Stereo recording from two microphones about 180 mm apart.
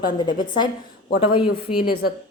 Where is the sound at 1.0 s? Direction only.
55° left (ahead or behind).